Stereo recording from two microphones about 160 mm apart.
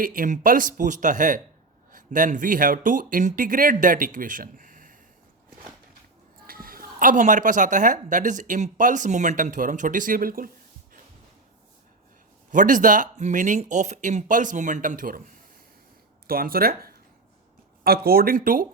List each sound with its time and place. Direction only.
0.0 s speech: 60° right (ahead or behind)
6.5 s a woman's voice: 65° right (ahead or behind)
12.5 s a woman's voice: 55° right (ahead or behind)
16.2 s speech: 65° right (ahead or behind)